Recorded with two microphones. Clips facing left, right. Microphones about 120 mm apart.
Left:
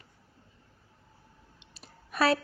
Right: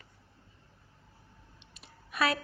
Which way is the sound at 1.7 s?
35° left (ahead or behind).